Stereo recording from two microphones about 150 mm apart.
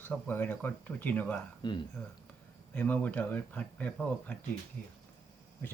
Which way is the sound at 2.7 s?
10° left (ahead or behind).